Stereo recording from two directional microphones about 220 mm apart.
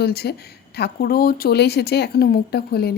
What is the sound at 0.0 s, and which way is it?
Speech, 45° left (ahead or behind).